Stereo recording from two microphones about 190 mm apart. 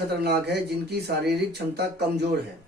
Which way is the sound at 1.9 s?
60° right (ahead or behind).